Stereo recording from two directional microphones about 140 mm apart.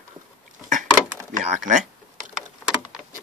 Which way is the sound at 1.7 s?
60° right (ahead or behind).